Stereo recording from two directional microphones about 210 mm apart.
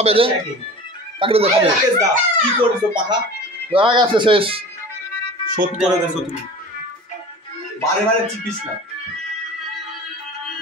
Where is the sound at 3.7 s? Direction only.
25° right (ahead or behind).